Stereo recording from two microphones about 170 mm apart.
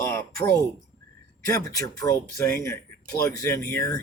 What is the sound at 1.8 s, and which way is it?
A man's voice, 20° left (ahead or behind).